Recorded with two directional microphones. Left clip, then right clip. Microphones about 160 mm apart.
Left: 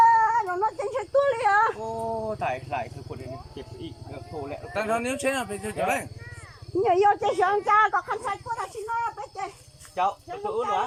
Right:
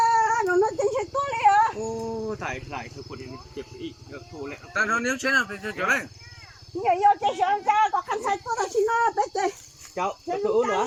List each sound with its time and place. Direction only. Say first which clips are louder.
0.3 s cat: right 2 dB; 35° right (ahead or behind)
1.1 s a sound: even; 5° right (ahead or behind)
3.5 s speech: right 3 dB; 20° left (ahead or behind)
6.8 s a woman's voice: right 1 dB; 5° left (ahead or behind)
7.8 s speech: even; 15° right (ahead or behind)
8.5 s speech: right 7 dB; 50° right (ahead or behind)
9.9 s speech: left 1 dB; 15° right (ahead or behind)
10.6 s speech: even; 30° right (ahead or behind)